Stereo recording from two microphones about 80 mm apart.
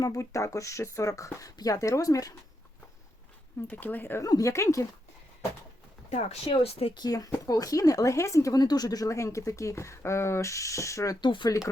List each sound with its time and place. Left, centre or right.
0.0 s speech: left
3.7 s speech: left
4.2 s speech: left
6.5 s speech: left
7.0 s speech: left
11.2 s speech: left
11.4 s speech: left